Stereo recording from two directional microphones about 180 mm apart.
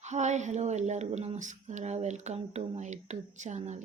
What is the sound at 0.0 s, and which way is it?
Speech, 40° right (ahead or behind).